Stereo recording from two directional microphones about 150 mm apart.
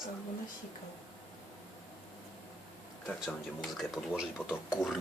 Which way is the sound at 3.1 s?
Centre (ahead or behind).